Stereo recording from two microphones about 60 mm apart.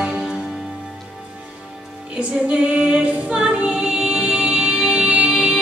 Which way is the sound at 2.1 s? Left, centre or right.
Centre.